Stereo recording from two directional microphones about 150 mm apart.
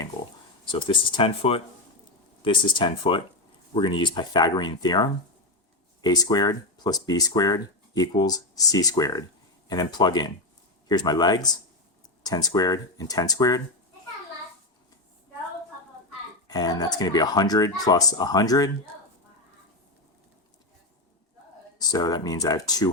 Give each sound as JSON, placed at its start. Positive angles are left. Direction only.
{"t": 0.6, "sound": "speech", "side_deg": 35}
{"t": 16.5, "sound": "speech", "side_deg": 25}
{"t": 21.8, "sound": "speech", "side_deg": 25}